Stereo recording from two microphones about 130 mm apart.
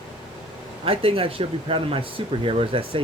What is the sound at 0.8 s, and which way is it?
Speech, 45° right (ahead or behind).